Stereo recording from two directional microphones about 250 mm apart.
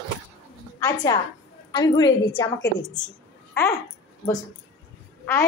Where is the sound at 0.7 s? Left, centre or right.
Centre.